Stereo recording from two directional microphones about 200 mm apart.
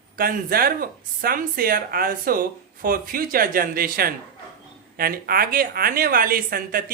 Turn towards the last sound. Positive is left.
turn(degrees=-45)  # may be behind; listen again after turning